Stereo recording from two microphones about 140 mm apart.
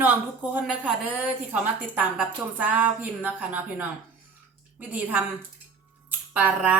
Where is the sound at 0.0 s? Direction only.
10° right (ahead or behind).